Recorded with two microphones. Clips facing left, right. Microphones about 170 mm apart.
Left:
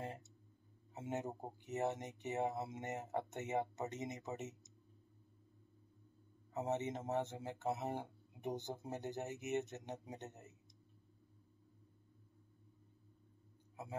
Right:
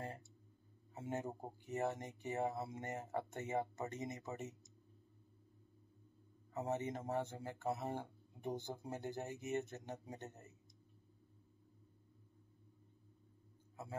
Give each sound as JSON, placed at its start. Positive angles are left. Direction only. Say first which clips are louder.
{"t": 0.0, "sound": "a sound", "louder": "left 1 dB", "side_deg": 20}
{"t": 0.9, "sound": "speech", "louder": "left 1 dB", "side_deg": 20}
{"t": 6.5, "sound": "speech", "louder": "left 1 dB", "side_deg": 20}